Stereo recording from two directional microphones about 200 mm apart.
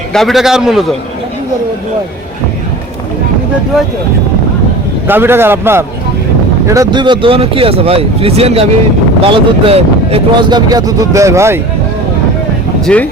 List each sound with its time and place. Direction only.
0.1 s a man's voice: centre (ahead or behind)
5.0 s a man's voice: 10° right (ahead or behind)
12.8 s speech: 5° left (ahead or behind)